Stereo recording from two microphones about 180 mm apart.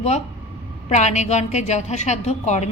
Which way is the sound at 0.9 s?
40° left (ahead or behind).